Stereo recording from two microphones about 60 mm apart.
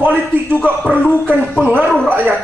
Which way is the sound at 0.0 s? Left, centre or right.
Right.